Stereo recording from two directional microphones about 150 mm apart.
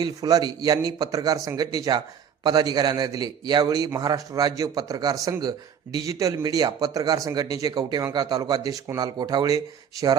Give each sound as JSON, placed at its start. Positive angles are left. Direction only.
{"t": 0.0, "sound": "a man's voice", "side_deg": -25}